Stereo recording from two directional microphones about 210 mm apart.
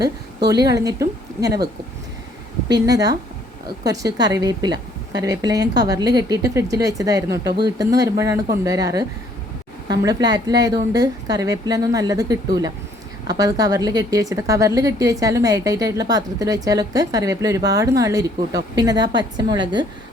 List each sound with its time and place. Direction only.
0.6 s a woman's voice: 15° right (ahead or behind)
2.7 s a woman's voice: 15° right (ahead or behind)